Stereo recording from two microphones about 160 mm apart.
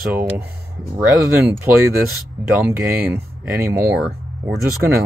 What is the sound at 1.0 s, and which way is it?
Speech, 15° right (ahead or behind).